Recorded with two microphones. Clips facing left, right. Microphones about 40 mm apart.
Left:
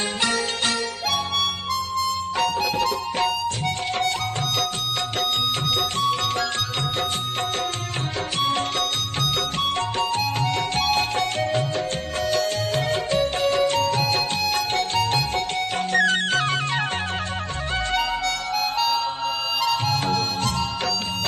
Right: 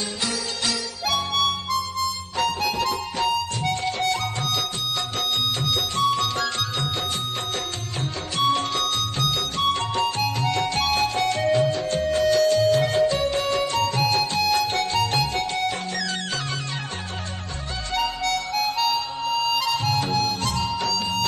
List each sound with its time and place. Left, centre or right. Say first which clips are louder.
0.2 s music: left 5 dB; left
1.0 s harmonica: right 3 dB; centre
2.4 s music: even; centre
5.9 s music: even; left
8.4 s music: right 2 dB; left
18.2 s harmonica: even; centre
18.9 s harmonica: even; centre
20.4 s music: even; left